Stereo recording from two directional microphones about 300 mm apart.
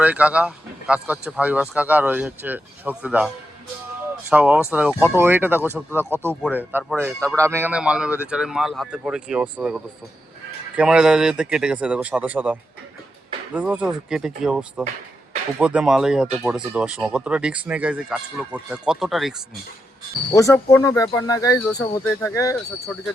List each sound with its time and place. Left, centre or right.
0.0 s speech: centre
4.3 s speech: centre
20.3 s speech: centre